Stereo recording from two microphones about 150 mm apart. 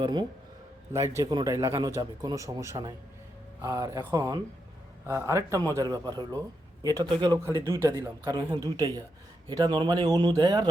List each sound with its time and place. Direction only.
0.0 s speech: 30° right (ahead or behind)
0.9 s speech: 20° right (ahead or behind)